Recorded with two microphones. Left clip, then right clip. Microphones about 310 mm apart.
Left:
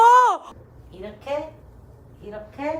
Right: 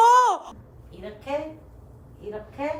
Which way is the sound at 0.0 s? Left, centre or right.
Centre.